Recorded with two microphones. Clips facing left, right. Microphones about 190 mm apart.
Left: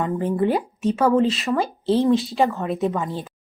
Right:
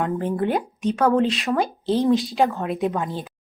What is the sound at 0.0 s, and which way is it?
Speech, 5° left (ahead or behind).